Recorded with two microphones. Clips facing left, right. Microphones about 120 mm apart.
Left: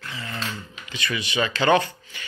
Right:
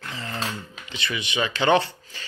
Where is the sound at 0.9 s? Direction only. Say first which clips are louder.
Left 1 dB; 25° right (ahead or behind).